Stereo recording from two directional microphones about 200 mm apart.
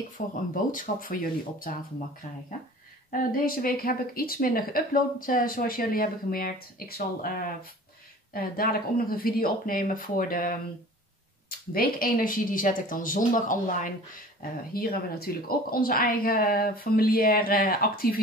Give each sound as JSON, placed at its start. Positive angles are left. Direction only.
{"t": 0.2, "sound": "speech", "side_deg": 40}
{"t": 3.1, "sound": "speech", "side_deg": 45}
{"t": 11.7, "sound": "speech", "side_deg": 45}